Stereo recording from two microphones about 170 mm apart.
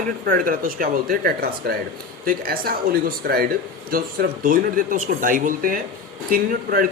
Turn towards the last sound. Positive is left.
turn(degrees=-60)  # may be behind; listen again after turning